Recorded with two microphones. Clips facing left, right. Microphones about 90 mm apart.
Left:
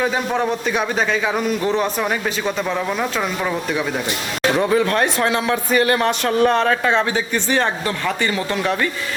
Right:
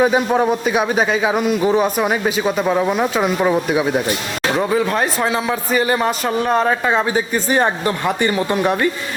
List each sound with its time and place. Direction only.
0.0 s a man's voice: 15° right (ahead or behind)
4.5 s a man's voice: 5° right (ahead or behind); by 8.5 s 20° right (ahead or behind)